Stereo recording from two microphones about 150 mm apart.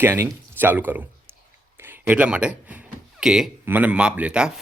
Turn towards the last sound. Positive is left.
turn(degrees=-5)  # may be behind; listen again after turning